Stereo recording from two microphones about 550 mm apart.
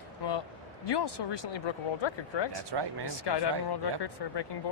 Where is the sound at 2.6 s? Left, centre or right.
Right.